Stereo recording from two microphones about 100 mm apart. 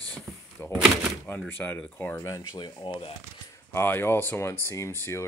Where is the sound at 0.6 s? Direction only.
25° left (ahead or behind).